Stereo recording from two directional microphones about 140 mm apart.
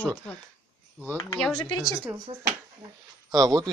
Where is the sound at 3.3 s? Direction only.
30° right (ahead or behind).